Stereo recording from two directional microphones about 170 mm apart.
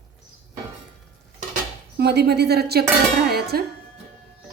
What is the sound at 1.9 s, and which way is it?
Speech, 75° right (ahead or behind).